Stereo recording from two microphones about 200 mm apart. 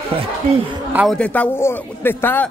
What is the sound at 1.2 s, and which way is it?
Speech, 10° left (ahead or behind).